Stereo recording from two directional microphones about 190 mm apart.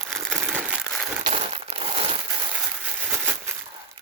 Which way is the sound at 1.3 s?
30° right (ahead or behind).